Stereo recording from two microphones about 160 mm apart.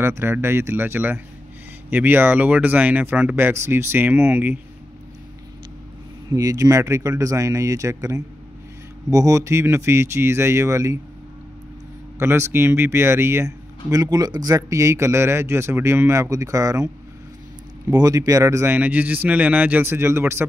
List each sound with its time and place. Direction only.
0.0 s speech: 15° right (ahead or behind)
6.3 s speech: 20° right (ahead or behind)
12.2 s speech: 15° right (ahead or behind)